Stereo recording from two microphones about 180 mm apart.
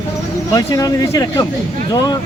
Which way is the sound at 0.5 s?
20° left (ahead or behind).